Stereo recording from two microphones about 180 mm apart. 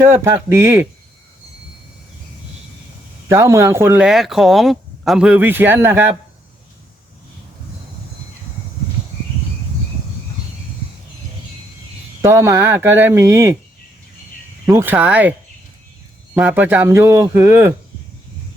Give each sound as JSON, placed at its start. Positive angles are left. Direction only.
{"t": 0.0, "sound": "speech", "side_deg": -15}
{"t": 3.2, "sound": "speech", "side_deg": -15}
{"t": 12.2, "sound": "speech", "side_deg": -15}
{"t": 14.7, "sound": "speech", "side_deg": -10}